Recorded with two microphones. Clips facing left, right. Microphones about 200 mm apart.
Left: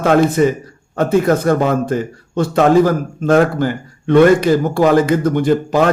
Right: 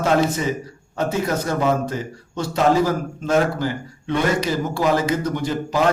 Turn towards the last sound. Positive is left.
turn(degrees=55)  # may be behind; listen again after turning